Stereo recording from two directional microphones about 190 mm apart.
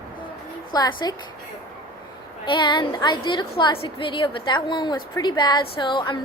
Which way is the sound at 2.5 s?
25° left (ahead or behind).